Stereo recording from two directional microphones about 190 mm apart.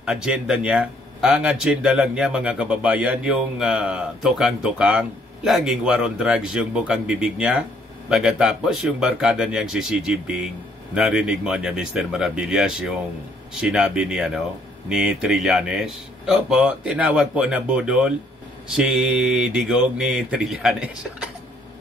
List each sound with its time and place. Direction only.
0.0 s speech: 5° right (ahead or behind)